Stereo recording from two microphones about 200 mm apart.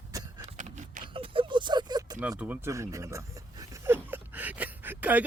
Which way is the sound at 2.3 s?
10° right (ahead or behind).